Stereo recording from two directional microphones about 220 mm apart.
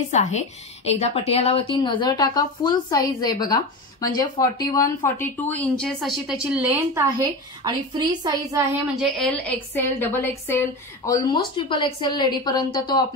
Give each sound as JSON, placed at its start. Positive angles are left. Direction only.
{"t": 0.1, "sound": "a woman's voice", "side_deg": 30}
{"t": 5.5, "sound": "a woman's voice", "side_deg": 5}
{"t": 9.0, "sound": "a woman's voice", "side_deg": 5}
{"t": 11.3, "sound": "a woman's voice", "side_deg": 20}